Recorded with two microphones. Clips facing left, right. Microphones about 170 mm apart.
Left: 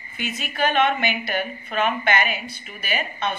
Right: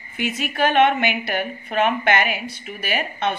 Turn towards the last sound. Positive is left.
turn(degrees=-65)  # may be behind; listen again after turning